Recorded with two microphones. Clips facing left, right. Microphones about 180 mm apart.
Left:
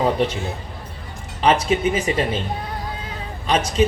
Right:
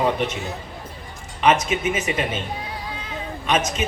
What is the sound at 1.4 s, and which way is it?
A man's voice, 35° left (ahead or behind).